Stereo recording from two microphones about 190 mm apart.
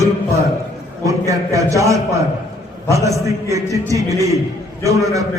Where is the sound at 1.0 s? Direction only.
15° right (ahead or behind).